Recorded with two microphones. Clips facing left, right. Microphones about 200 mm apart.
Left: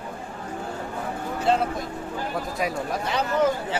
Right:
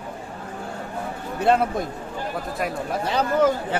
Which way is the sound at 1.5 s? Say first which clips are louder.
Right 3 dB; 60° right (ahead or behind).